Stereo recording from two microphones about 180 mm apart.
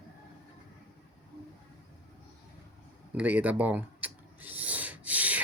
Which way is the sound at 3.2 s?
10° right (ahead or behind).